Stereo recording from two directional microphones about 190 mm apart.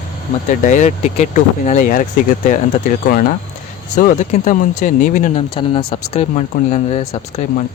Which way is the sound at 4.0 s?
40° left (ahead or behind).